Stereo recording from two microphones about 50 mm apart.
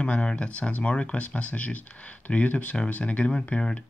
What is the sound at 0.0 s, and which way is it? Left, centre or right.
Speech, left.